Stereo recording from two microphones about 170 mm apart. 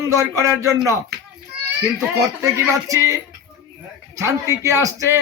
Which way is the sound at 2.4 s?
15° right (ahead or behind).